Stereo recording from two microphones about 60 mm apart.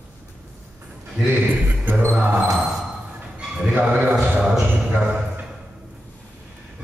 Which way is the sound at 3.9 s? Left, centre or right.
Right.